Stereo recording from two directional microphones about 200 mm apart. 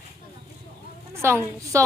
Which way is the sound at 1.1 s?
15° right (ahead or behind).